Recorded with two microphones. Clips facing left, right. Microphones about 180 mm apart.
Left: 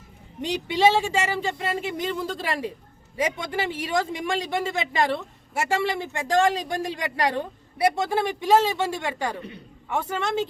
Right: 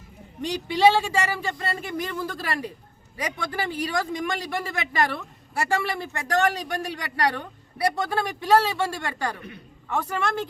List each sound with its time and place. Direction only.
0.4 s a man's voice: 20° left (ahead or behind)